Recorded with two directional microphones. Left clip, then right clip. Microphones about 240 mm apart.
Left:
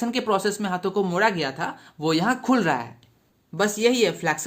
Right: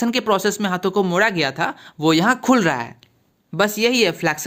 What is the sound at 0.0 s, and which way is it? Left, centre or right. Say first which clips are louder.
Speech: right 5 dB; right.